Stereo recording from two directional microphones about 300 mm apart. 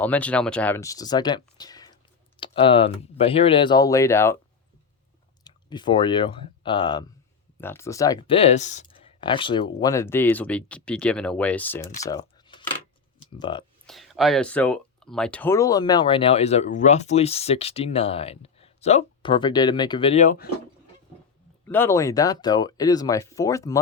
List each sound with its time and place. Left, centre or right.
0.0 s speech: centre
5.4 s speech: centre
12.0 s a sound: centre
13.4 s speech: centre
13.8 s speech: centre; by 20.5 s left
21.7 s speech: centre